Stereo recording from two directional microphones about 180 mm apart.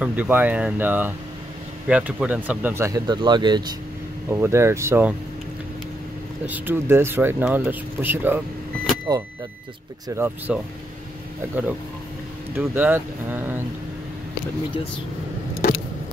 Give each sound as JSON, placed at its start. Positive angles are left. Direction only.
{"t": 0.0, "sound": "speech", "side_deg": -10}
{"t": 6.4, "sound": "speech", "side_deg": -10}
{"t": 9.1, "sound": "speech", "side_deg": -20}
{"t": 12.5, "sound": "speech", "side_deg": -10}